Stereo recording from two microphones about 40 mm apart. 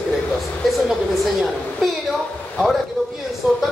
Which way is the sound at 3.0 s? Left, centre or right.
Centre.